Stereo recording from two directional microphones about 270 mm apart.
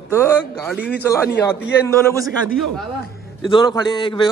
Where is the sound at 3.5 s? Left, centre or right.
Centre.